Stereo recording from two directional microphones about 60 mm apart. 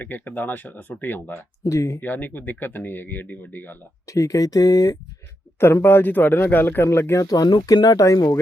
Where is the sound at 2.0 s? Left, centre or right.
Left.